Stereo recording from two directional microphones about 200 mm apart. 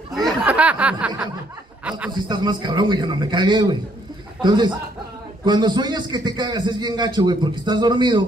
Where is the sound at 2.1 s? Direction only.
20° right (ahead or behind).